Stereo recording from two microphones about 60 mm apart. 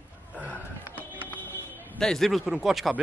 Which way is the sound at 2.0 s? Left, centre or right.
Centre.